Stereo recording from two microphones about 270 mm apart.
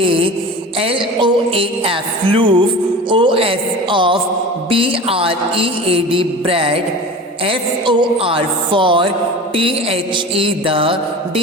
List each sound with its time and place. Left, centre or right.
0.0 s mantra: centre
3.1 s speech: centre
4.7 s mantra: centre